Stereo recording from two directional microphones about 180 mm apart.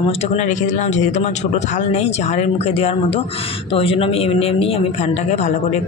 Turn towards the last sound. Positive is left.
turn(degrees=40)  # may be behind; listen again after turning